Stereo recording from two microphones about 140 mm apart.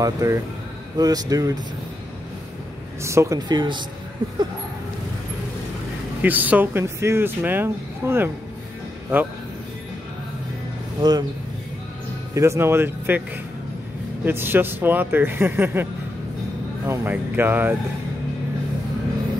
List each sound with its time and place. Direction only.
0.0 s speech: 25° right (ahead or behind)
3.0 s speech: 20° right (ahead or behind)
3.3 s speech: 30° right (ahead or behind)
6.2 s speech: 10° right (ahead or behind)
11.0 s speech: 30° right (ahead or behind)
12.4 s speech: 20° right (ahead or behind)
14.2 s speech: 15° right (ahead or behind)